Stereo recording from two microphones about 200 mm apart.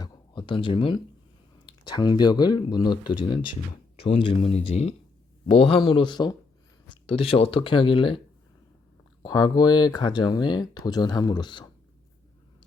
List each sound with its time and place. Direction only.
0.0 s a sound: 25° left (ahead or behind)
1.6 s speech: 20° left (ahead or behind)
9.2 s speech: 20° left (ahead or behind)